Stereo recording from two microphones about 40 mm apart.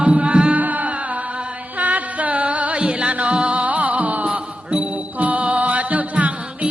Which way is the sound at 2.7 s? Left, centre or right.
Right.